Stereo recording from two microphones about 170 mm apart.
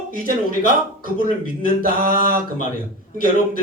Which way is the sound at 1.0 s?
55° right (ahead or behind).